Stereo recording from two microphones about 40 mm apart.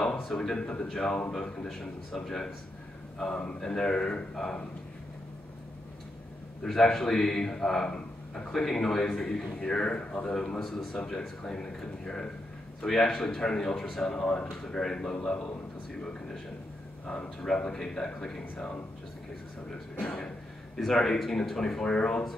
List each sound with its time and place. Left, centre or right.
0.4 s a man's voice: centre
6.6 s a man's voice: centre; by 10.3 s left
10.3 s a man's voice: centre
20.1 s speech: centre
20.7 s a man's voice: centre
21.8 s speech: centre